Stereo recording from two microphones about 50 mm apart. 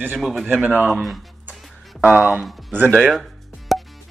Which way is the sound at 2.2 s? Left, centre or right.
Centre.